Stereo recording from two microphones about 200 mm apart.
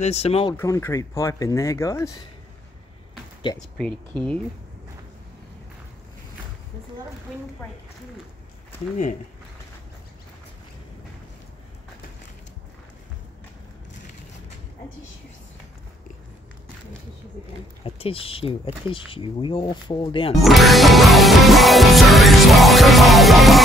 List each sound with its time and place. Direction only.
0.0 s speech: 30° left (ahead or behind)
0.6 s speech: 15° left (ahead or behind)
3.7 s speech: 5° left (ahead or behind)
17.8 s speech: 30° left (ahead or behind)
20.3 s music: centre (ahead or behind)